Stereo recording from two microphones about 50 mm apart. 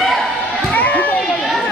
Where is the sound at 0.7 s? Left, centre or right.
Left.